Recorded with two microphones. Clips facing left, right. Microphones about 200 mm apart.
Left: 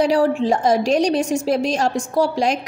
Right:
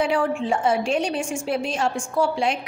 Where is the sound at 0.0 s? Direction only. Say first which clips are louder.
Left 5 dB; 35° left (ahead or behind).